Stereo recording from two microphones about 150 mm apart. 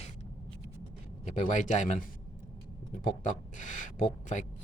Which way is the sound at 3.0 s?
55° left (ahead or behind).